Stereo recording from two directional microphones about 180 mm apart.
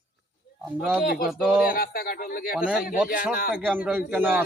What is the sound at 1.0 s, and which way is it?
Speech, 55° left (ahead or behind).